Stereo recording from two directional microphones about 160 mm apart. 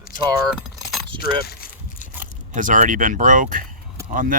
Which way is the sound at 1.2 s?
65° left (ahead or behind).